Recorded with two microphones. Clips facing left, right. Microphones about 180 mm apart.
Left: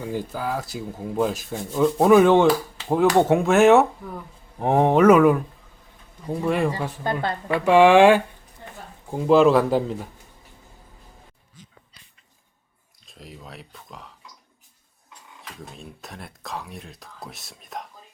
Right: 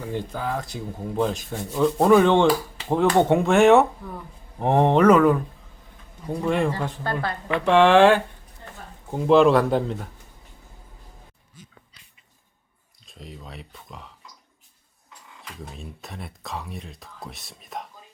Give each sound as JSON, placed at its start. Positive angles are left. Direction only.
{"t": 0.1, "sound": "rub", "side_deg": 5}
{"t": 6.2, "sound": "speech", "side_deg": 5}
{"t": 7.4, "sound": "speech", "side_deg": 10}
{"t": 9.0, "sound": "rub", "side_deg": 0}
{"t": 13.1, "sound": "speech", "side_deg": 0}
{"t": 15.4, "sound": "rub", "side_deg": 0}